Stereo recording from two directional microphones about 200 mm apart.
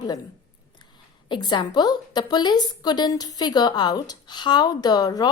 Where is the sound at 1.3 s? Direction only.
20° left (ahead or behind).